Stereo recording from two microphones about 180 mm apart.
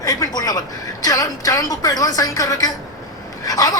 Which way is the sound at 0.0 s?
20° left (ahead or behind).